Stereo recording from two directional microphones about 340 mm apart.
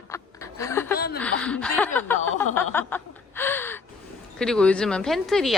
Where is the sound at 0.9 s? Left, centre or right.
Left.